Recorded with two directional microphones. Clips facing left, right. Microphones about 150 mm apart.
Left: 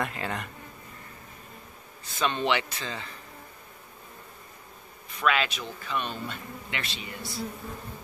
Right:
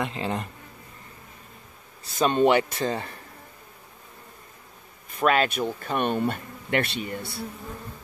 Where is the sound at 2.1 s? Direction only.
40° right (ahead or behind).